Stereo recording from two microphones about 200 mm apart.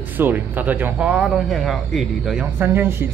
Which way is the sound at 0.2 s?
10° right (ahead or behind).